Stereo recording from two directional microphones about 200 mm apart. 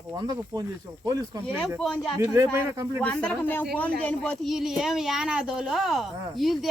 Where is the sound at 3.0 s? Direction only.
5° left (ahead or behind).